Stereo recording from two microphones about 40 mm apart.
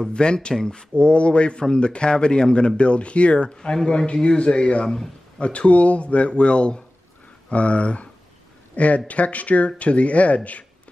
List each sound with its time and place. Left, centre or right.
0.0 s a man's voice: left
0.9 s a man's voice: left
4.8 s a man's voice: centre
5.4 s a man's voice: left